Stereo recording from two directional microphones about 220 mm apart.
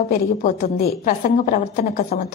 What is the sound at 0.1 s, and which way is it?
A woman's voice, 40° left (ahead or behind).